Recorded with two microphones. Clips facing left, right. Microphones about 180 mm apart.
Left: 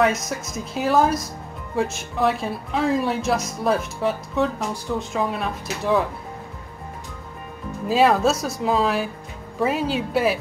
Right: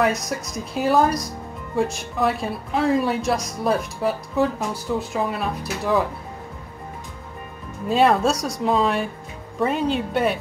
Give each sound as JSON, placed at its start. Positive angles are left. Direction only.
{"t": 0.0, "sound": "speech", "side_deg": 0}
{"t": 7.9, "sound": "speech", "side_deg": 0}